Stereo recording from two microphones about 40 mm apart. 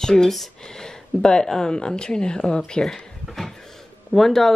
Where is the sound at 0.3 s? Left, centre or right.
Centre.